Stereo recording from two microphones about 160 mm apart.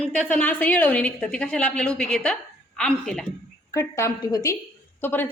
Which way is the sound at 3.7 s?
15° left (ahead or behind).